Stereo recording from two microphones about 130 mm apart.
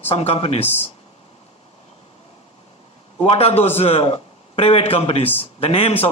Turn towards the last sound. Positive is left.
turn(degrees=50)  # may be behind; listen again after turning